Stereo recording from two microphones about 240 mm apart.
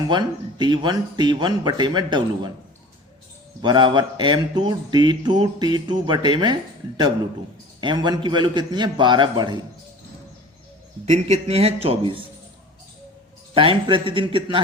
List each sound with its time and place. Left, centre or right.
0.1 s speech: centre
3.6 s speech: centre
7.8 s speech: centre
11.0 s speech: right
13.5 s speech: right